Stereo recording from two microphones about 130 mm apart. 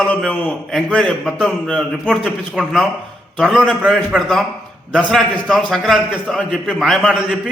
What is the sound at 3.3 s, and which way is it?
A man's voice, 5° left (ahead or behind).